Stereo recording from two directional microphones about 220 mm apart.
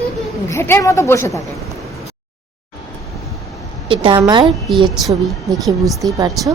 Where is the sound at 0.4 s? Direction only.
10° left (ahead or behind).